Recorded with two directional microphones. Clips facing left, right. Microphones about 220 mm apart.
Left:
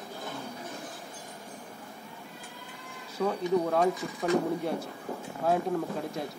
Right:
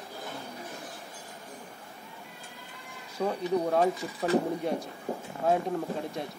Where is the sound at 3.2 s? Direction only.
15° right (ahead or behind).